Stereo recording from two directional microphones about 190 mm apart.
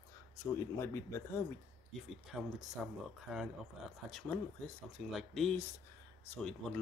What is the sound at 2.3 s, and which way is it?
Speech, 5° right (ahead or behind).